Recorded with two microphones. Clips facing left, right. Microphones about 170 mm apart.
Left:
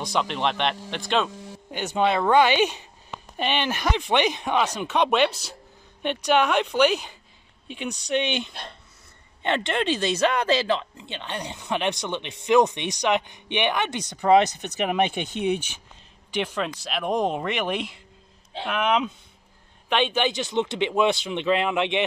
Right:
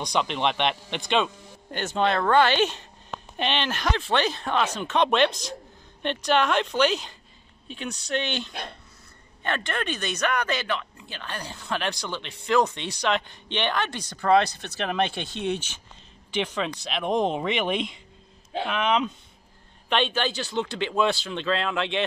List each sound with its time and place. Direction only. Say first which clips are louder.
0.0 s speech: even; centre (ahead or behind)